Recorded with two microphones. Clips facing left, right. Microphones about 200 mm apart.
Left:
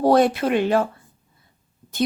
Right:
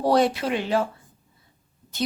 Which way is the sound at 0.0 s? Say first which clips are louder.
Left 4 dB; 50° left (ahead or behind).